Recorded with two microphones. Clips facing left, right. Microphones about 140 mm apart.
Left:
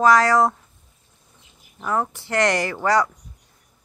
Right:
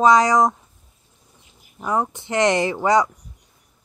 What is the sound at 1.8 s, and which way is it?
A woman's voice, 15° right (ahead or behind).